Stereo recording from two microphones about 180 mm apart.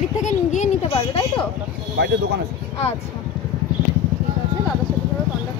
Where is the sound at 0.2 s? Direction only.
40° left (ahead or behind).